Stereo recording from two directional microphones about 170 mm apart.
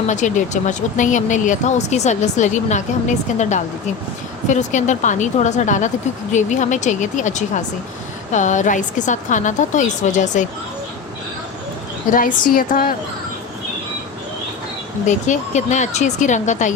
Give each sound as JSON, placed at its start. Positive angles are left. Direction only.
{"t": 0.1, "sound": "speech", "side_deg": 45}
{"t": 4.4, "sound": "speech", "side_deg": 45}
{"t": 12.1, "sound": "a woman's voice", "side_deg": 55}
{"t": 15.0, "sound": "speech", "side_deg": 45}